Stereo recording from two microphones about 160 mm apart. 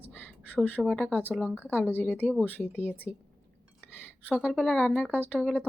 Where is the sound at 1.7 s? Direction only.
10° left (ahead or behind).